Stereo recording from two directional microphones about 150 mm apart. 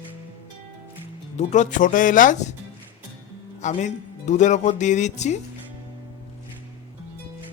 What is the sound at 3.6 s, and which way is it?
Speech, 55° left (ahead or behind).